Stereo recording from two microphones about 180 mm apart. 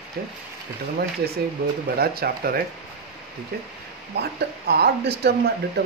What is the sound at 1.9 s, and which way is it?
Speech, 60° right (ahead or behind).